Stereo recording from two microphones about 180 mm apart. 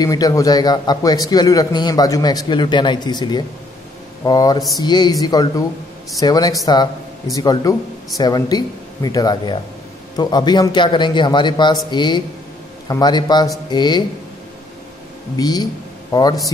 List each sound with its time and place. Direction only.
0.0 s a man's voice: 20° left (ahead or behind)
15.3 s speech: 20° left (ahead or behind)